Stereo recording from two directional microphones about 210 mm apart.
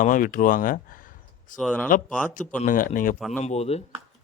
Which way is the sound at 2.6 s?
40° left (ahead or behind).